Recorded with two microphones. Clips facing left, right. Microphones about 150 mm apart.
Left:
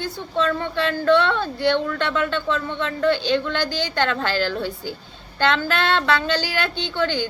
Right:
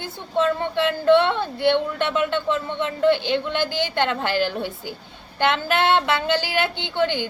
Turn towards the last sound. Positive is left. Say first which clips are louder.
# even
turn(degrees=-20)  # may be behind; listen again after turning